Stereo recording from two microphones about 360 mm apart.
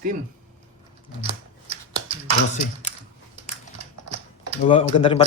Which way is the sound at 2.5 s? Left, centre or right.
Centre.